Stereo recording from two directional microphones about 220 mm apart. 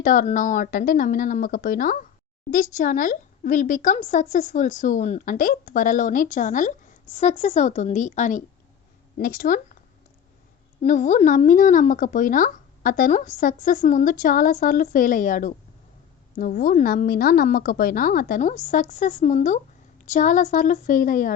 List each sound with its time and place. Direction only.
0.0 s speech: 35° left (ahead or behind)
10.8 s speech: 35° left (ahead or behind)